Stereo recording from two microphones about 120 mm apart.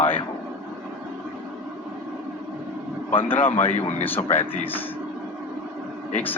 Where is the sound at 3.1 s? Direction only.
50° left (ahead or behind).